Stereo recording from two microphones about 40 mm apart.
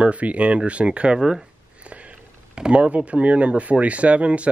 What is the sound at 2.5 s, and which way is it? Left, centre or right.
Speech, right.